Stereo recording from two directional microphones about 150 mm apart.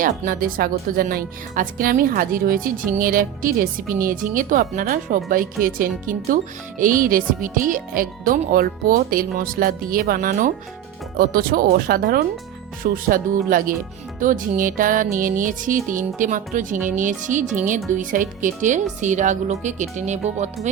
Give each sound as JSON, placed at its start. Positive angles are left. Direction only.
{"t": 0.0, "sound": "speech", "side_deg": -65}
{"t": 12.8, "sound": "speech", "side_deg": -65}